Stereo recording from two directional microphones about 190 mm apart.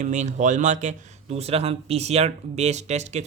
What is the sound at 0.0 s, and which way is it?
Speech, 40° right (ahead or behind).